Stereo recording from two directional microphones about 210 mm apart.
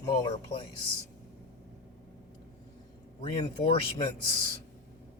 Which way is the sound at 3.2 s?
25° left (ahead or behind).